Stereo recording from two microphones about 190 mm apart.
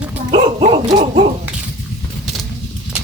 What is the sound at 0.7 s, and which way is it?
Dog, 35° right (ahead or behind).